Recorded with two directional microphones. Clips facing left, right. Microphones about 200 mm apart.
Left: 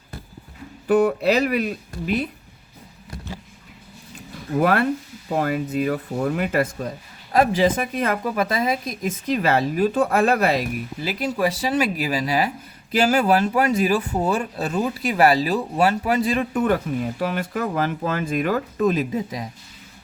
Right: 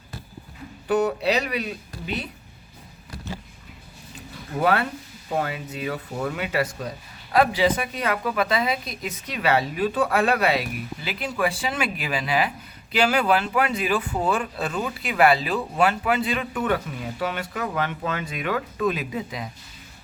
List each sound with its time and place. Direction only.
0.9 s a woman's voice: 55° left (ahead or behind)
4.6 s a woman's voice: 50° left (ahead or behind)